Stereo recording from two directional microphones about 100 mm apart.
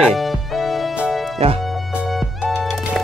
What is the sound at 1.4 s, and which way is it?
Speech, 80° right.